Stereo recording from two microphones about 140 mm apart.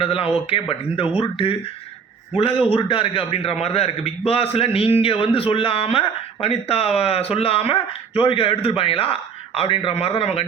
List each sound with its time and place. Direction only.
0.0 s a man's voice: 40° left (ahead or behind)